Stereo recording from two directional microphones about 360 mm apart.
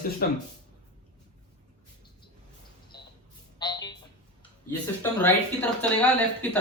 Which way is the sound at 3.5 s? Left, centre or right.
Centre.